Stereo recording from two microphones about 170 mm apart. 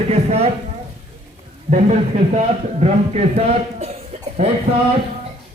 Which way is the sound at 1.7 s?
40° right (ahead or behind).